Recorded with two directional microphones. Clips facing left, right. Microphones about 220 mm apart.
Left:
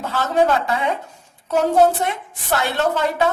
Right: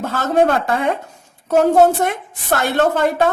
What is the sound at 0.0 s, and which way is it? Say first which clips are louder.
Speech: right 3 dB; 50° right (ahead or behind).